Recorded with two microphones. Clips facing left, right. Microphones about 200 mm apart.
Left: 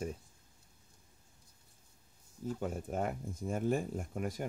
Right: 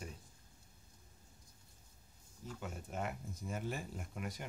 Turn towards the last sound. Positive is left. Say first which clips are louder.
# left 7 dB
turn(degrees=45)  # may be behind; listen again after turning